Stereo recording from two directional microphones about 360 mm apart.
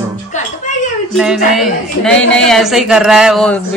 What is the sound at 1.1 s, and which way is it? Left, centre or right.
Speech, centre.